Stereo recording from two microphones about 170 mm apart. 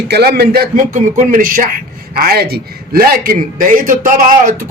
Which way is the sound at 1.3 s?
55° right (ahead or behind).